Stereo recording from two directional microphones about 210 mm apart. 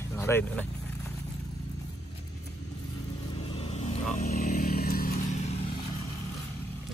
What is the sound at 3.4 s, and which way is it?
Vehicle, 25° left (ahead or behind).